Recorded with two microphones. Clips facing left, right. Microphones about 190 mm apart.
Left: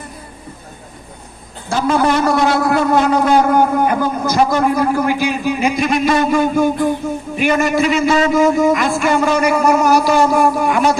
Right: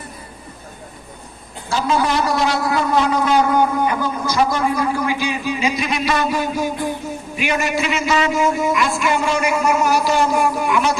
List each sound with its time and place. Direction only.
1.7 s a man's voice: 50° left (ahead or behind)